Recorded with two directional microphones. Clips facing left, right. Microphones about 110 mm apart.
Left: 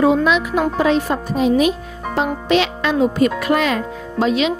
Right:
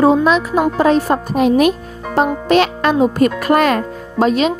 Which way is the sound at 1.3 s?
60° right (ahead or behind).